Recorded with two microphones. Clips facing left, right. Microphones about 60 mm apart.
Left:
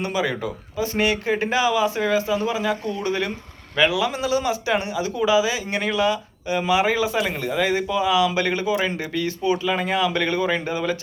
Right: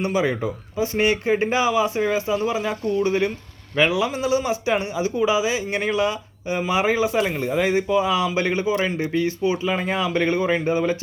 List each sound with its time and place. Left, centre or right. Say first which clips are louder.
0.0 s speech: right 2 dB; right